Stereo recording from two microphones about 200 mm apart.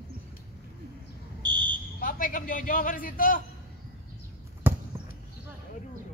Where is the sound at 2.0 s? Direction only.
45° left (ahead or behind).